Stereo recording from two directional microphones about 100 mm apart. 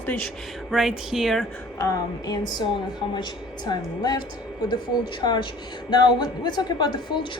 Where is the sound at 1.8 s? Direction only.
40° left (ahead or behind).